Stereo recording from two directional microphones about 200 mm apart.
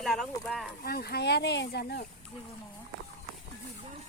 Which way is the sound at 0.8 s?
50° left (ahead or behind).